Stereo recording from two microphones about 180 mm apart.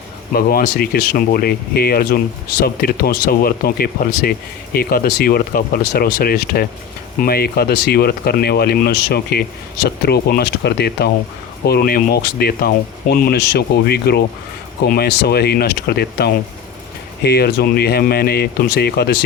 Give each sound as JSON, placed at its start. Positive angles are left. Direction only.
{"t": 0.3, "sound": "speech", "side_deg": 55}